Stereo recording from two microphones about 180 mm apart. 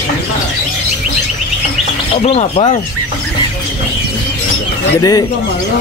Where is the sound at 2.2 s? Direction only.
35° left (ahead or behind).